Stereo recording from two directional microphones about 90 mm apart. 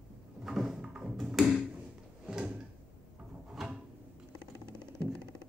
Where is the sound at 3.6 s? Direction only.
Centre (ahead or behind).